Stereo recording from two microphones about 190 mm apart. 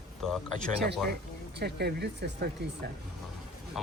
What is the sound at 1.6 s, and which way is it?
Speech, 60° right (ahead or behind).